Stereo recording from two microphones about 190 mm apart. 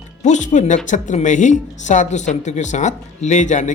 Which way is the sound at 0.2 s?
40° left (ahead or behind).